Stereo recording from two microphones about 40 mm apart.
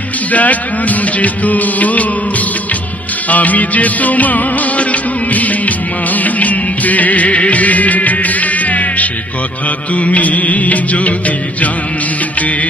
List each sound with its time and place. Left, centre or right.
0.3 s music: left
3.3 s music: left